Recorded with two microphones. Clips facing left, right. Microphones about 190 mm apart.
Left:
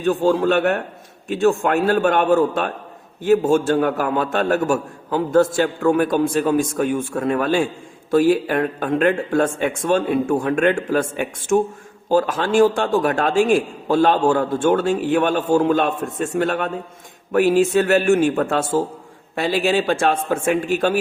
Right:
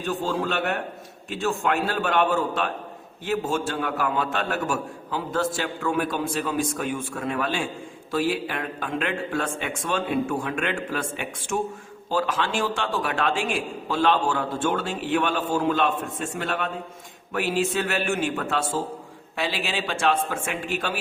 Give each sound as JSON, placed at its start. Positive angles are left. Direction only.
{"t": 0.0, "sound": "a man's voice", "side_deg": 50}